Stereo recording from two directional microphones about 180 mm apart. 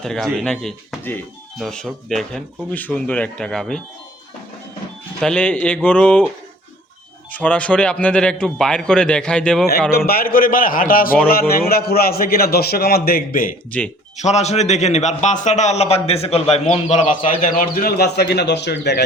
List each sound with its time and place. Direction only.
0.0 s a man's voice: centre (ahead or behind)
5.2 s a man's voice: 5° left (ahead or behind)
10.1 s a man's voice: 55° left (ahead or behind)
13.7 s a man's voice: 5° left (ahead or behind)
14.2 s a man's voice: 40° left (ahead or behind); by 19.0 s 65° left (ahead or behind)